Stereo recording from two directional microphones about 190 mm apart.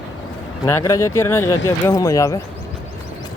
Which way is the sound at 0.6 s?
15° left (ahead or behind).